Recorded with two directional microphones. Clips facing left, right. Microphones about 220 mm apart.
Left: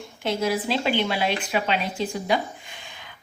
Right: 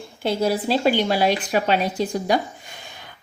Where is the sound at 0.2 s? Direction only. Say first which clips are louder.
Right 3 dB; 35° right (ahead or behind).